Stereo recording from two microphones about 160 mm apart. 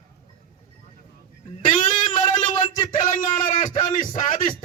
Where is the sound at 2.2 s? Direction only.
35° left (ahead or behind).